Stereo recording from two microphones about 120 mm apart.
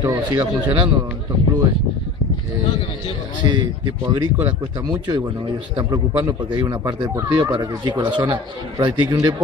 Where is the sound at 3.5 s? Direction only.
40° right (ahead or behind).